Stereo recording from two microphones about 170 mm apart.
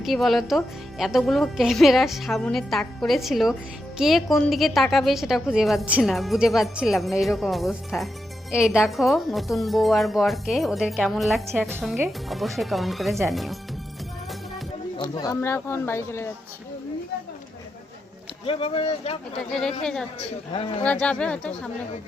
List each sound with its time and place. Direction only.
0.0 s a woman's voice: centre (ahead or behind)
15.2 s a man's voice: 20° left (ahead or behind)
18.4 s speech: 30° left (ahead or behind)
19.8 s a woman's voice: 5° left (ahead or behind)
20.5 s speech: 30° left (ahead or behind)
20.8 s a man's voice: 5° left (ahead or behind)